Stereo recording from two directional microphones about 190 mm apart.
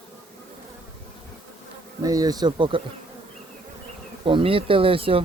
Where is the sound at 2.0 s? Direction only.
20° right (ahead or behind).